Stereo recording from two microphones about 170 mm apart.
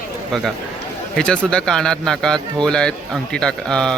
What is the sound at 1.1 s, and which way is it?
Speech, 5° left (ahead or behind).